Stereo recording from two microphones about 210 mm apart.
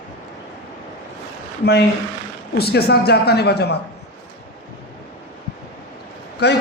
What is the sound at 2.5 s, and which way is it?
Speech, 50° left (ahead or behind).